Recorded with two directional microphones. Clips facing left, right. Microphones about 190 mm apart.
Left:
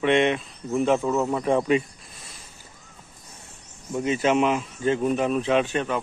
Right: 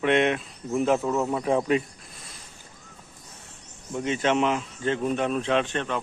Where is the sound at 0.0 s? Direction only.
Centre (ahead or behind).